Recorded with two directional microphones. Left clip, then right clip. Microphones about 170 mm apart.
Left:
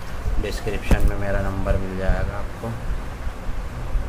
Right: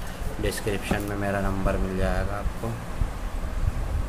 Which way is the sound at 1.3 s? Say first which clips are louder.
Left 2 dB; 20° right (ahead or behind).